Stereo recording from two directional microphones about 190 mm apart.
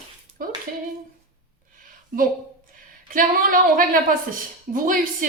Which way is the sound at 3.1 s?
45° right (ahead or behind).